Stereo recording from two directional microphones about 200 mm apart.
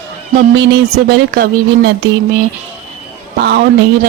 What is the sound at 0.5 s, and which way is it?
Speech, 60° right (ahead or behind).